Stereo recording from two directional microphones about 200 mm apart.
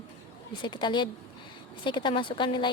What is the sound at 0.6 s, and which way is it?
A woman's voice, 20° left (ahead or behind).